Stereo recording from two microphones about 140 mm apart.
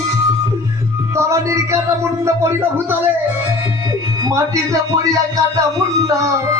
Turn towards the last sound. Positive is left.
turn(degrees=-25)  # may be behind; listen again after turning